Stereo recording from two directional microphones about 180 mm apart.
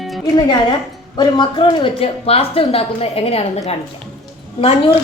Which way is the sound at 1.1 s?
25° left (ahead or behind).